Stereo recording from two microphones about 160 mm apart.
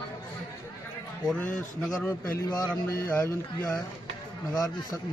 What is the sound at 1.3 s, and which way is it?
Speech, 10° left (ahead or behind).